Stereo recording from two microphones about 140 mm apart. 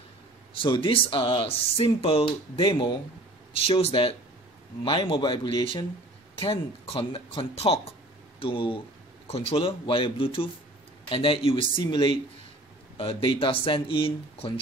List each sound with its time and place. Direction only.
0.6 s speech: 40° left (ahead or behind)